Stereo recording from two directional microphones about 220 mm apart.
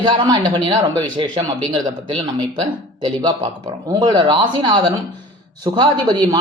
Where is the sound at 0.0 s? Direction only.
20° right (ahead or behind).